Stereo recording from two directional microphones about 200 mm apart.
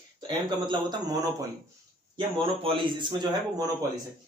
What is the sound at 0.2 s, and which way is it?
Speech, 25° right (ahead or behind).